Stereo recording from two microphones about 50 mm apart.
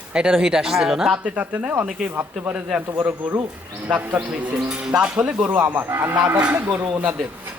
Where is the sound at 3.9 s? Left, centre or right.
Right.